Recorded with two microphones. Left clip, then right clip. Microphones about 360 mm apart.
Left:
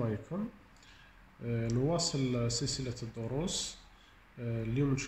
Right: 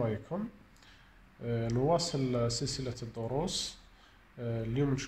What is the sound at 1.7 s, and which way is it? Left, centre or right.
Speech, right.